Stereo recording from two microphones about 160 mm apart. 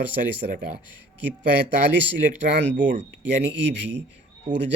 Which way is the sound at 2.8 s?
55° right (ahead or behind).